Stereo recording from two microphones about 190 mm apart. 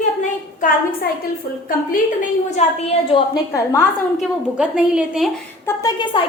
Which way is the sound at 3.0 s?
25° left (ahead or behind).